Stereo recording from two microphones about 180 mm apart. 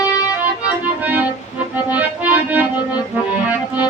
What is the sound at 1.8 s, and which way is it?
Music, 10° right (ahead or behind).